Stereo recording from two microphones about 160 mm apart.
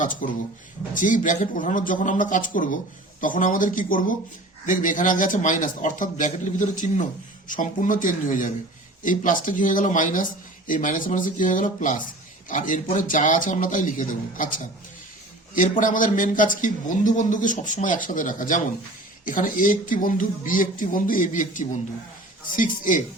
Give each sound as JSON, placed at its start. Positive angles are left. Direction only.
{"t": 0.0, "sound": "a man's voice", "side_deg": 55}
{"t": 15.8, "sound": "a man's voice", "side_deg": 55}